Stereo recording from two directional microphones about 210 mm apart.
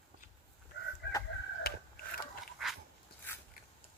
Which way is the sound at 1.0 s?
55° left (ahead or behind).